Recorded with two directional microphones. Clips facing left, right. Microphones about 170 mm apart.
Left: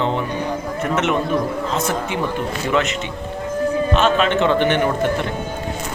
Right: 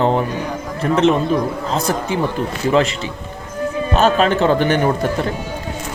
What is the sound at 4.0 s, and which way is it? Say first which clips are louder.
Speech: right 5 dB; 40° right (ahead or behind).